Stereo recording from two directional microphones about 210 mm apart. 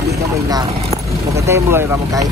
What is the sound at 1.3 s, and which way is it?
Speech, 15° right (ahead or behind).